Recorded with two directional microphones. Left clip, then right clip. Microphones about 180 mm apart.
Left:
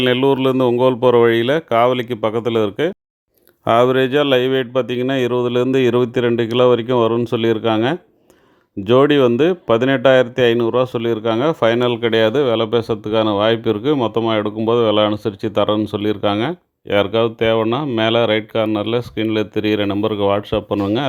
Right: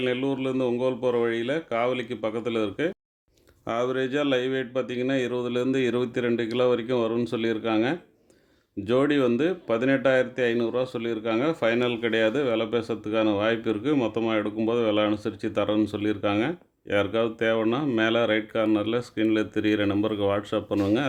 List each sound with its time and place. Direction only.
0.0 s speech: 50° left (ahead or behind)
3.6 s speech: 50° left (ahead or behind); by 21.1 s 25° left (ahead or behind)